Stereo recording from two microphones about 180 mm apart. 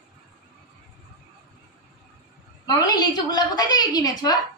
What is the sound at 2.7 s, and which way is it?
A woman's voice, 20° left (ahead or behind).